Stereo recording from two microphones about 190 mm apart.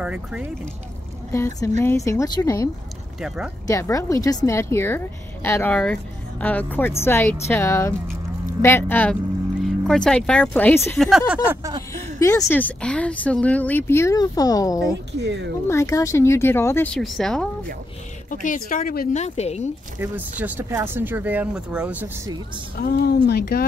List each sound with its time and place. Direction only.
0.0 s speech: 5° right (ahead or behind)
1.3 s speech: 15° left (ahead or behind)
3.2 s speech: 5° right (ahead or behind)
3.6 s speech: 15° left (ahead or behind)
11.0 s speech: centre (ahead or behind)
11.9 s speech: 15° left (ahead or behind)
15.1 s speech: 65° right (ahead or behind)
15.7 s speech: 15° left (ahead or behind)
18.3 s a woman's voice: 45° left (ahead or behind)
20.0 s speech: 10° right (ahead or behind)
22.8 s speech: 55° left (ahead or behind)